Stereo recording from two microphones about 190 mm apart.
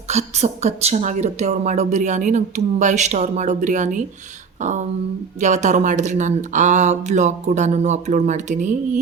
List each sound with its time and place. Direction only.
0.1 s a woman's voice: 35° right (ahead or behind)